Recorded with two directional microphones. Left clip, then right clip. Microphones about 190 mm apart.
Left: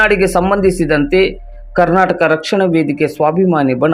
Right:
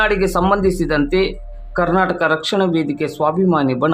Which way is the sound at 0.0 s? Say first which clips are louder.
Left 5 dB; 15° left (ahead or behind).